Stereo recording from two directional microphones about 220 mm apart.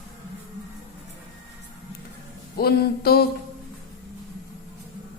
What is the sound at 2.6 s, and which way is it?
Speech, 45° left (ahead or behind).